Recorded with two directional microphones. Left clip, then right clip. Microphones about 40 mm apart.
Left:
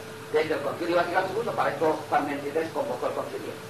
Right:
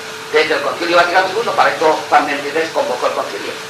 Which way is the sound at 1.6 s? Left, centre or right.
Centre.